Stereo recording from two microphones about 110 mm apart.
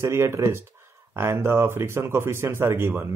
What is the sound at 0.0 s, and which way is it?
A man's voice, 25° right (ahead or behind).